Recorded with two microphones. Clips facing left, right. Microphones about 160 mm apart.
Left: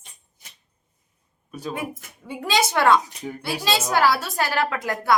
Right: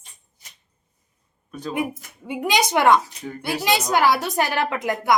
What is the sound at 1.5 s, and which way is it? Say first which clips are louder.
Speech: right 1 dB; 10° left (ahead or behind).